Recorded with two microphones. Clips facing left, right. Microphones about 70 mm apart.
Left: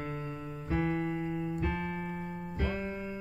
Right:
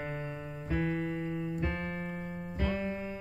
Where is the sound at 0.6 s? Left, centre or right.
Centre.